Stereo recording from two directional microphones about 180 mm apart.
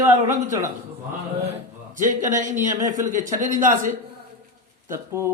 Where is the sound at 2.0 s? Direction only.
45° right (ahead or behind).